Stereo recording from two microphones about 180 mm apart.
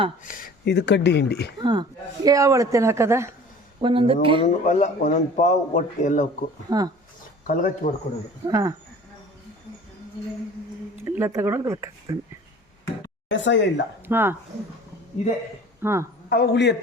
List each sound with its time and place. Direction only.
0.3 s speech: 50° left (ahead or behind)
1.6 s speech: 25° right (ahead or behind)
3.8 s speech: 30° right (ahead or behind)
4.4 s a man's voice: 45° left (ahead or behind)
6.7 s speech: 20° right (ahead or behind)
7.4 s a man's voice: 50° left (ahead or behind)
8.4 s speech: 20° right (ahead or behind)
11.0 s speech: 15° right (ahead or behind)
13.2 s speech: 90° left
14.1 s speech: 10° right (ahead or behind)
15.8 s a woman's voice: 15° right (ahead or behind)
16.3 s a man's voice: 65° left (ahead or behind)